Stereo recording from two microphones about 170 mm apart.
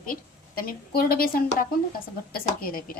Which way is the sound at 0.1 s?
60° left (ahead or behind).